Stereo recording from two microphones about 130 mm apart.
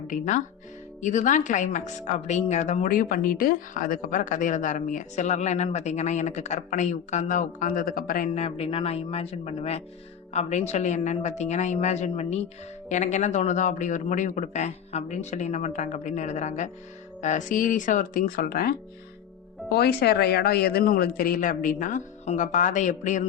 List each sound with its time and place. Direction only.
0.1 s a woman's voice: 70° left (ahead or behind); by 8.4 s 90° left
8.4 s a woman's voice: 50° left (ahead or behind); by 18.6 s 90° left
20.8 s a woman's voice: 90° left; by 23.2 s 70° left (ahead or behind)